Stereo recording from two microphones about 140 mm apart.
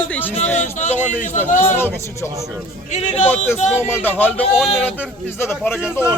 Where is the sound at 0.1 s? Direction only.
15° left (ahead or behind).